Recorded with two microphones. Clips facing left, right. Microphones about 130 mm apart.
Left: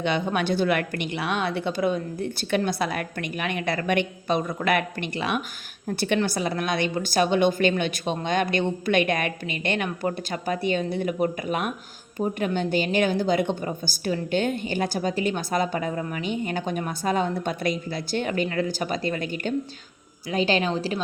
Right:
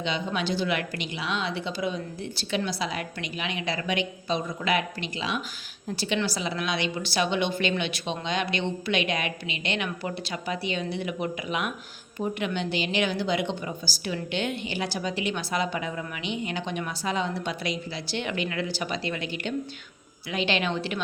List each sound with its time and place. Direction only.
0.0 s a woman's voice: 55° left (ahead or behind); by 21.0 s 35° left (ahead or behind)